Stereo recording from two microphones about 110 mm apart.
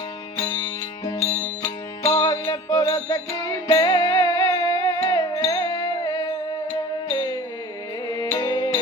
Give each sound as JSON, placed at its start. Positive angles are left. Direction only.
{"t": 0.5, "sound": "music", "side_deg": 35}
{"t": 8.0, "sound": "music", "side_deg": 35}